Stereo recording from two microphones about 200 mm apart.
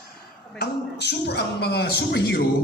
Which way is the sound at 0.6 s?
55° left (ahead or behind).